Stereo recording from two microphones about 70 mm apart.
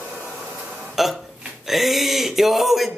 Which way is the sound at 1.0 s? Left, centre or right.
Centre.